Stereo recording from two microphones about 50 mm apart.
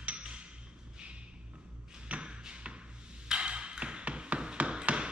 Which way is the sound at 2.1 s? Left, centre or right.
Right.